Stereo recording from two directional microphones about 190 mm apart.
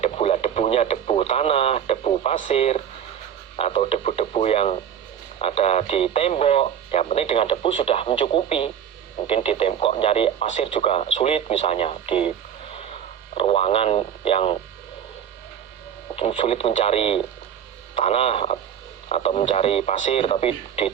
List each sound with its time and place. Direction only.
0.0 s radio: 30° left (ahead or behind)
3.6 s speech: 30° left (ahead or behind)
16.1 s speech: 30° left (ahead or behind)